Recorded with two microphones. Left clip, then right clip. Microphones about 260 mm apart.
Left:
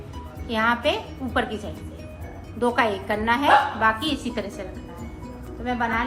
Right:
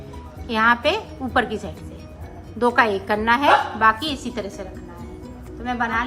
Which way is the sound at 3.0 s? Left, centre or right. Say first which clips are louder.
Right 3 dB; centre.